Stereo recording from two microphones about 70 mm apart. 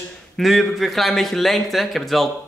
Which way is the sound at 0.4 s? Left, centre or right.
Centre.